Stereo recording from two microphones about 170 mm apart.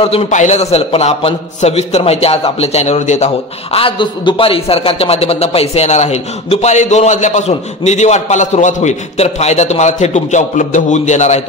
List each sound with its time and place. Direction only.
0.0 s a man's voice: 35° left (ahead or behind)
3.7 s a man's voice: 30° left (ahead or behind)